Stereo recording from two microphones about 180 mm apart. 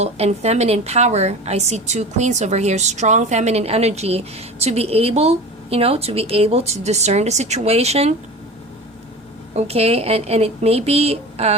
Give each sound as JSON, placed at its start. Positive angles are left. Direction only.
{"t": 0.0, "sound": "a woman's voice", "side_deg": -35}
{"t": 9.6, "sound": "a woman's voice", "side_deg": -35}